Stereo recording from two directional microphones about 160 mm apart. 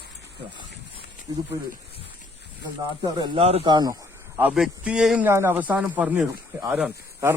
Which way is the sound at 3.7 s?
25° right (ahead or behind).